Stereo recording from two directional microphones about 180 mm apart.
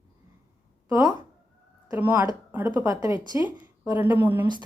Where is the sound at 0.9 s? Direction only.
20° right (ahead or behind).